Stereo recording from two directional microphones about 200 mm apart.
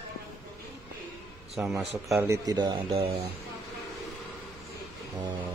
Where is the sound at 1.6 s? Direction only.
10° right (ahead or behind).